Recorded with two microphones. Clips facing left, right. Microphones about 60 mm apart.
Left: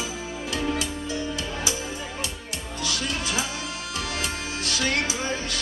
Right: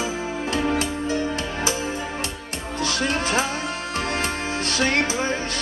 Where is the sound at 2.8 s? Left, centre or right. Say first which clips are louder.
Right 6 dB; right.